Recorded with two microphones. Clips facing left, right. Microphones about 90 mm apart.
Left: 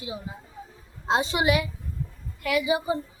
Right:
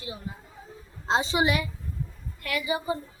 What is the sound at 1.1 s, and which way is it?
A woman's voice, 5° left (ahead or behind).